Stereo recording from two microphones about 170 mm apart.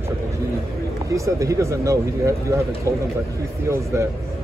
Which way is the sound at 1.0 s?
20° right (ahead or behind).